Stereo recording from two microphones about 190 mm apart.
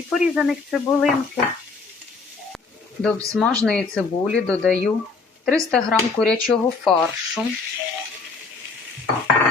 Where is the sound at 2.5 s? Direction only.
5° left (ahead or behind).